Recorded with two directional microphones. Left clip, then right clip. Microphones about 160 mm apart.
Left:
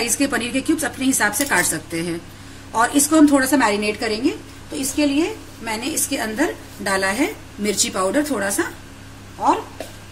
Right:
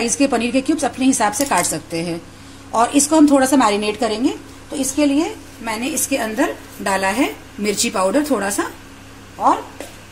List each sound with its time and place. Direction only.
0.0 s a woman's voice: 30° right (ahead or behind)